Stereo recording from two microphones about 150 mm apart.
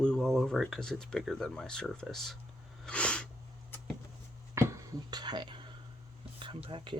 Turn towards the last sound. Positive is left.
turn(degrees=-35)  # may be behind; listen again after turning